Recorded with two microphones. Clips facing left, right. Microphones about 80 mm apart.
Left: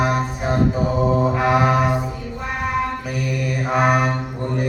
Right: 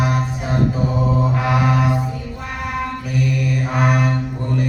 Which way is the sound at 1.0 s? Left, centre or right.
Centre.